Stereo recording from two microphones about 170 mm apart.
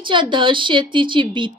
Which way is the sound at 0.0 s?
30° right (ahead or behind).